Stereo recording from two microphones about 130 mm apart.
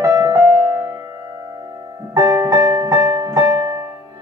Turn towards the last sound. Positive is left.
turn(degrees=-25)  # may be behind; listen again after turning